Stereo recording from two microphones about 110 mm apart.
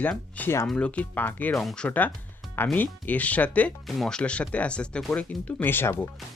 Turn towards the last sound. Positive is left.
turn(degrees=20)  # may be behind; listen again after turning